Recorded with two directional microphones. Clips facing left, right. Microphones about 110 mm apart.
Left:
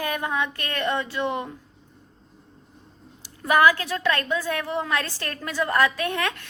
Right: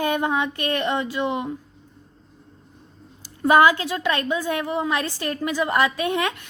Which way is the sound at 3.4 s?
25° right (ahead or behind).